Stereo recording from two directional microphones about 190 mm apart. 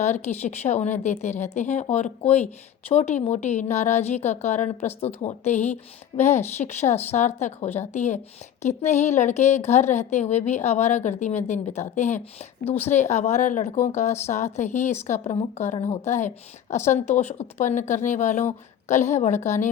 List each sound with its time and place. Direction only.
0.0 s speech: 35° left (ahead or behind)